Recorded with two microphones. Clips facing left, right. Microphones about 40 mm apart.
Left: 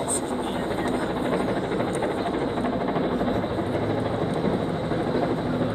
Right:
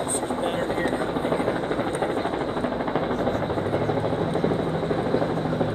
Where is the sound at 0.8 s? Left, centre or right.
Right.